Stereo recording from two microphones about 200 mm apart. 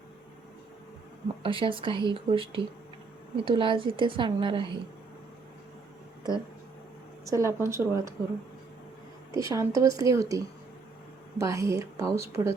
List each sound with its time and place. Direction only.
1.4 s a woman's voice: 25° right (ahead or behind)
7.3 s a woman's voice: 15° right (ahead or behind)
9.3 s a woman's voice: 15° right (ahead or behind)